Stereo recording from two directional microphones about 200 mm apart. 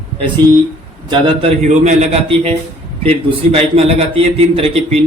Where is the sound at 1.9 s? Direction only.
30° right (ahead or behind).